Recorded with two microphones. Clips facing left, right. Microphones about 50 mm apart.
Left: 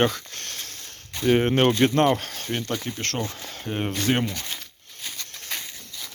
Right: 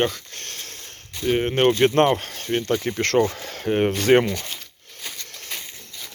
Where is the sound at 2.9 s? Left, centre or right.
Right.